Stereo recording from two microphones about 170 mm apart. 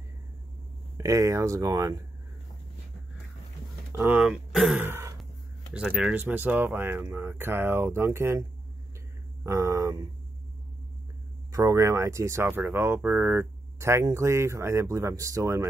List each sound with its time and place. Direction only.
0.9 s speech: 20° right (ahead or behind)
3.9 s speech: 5° right (ahead or behind)
4.8 s throat clearing: 15° right (ahead or behind)
5.7 s speech: 5° right (ahead or behind); by 10.0 s 20° right (ahead or behind)
11.5 s speech: 15° right (ahead or behind)